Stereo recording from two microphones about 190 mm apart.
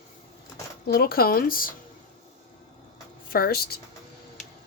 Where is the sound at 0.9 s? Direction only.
55° left (ahead or behind).